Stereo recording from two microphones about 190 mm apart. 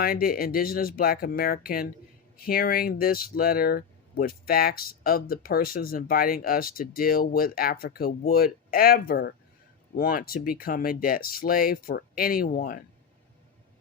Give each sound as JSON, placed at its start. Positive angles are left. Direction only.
{"t": 0.0, "sound": "speech", "side_deg": 50}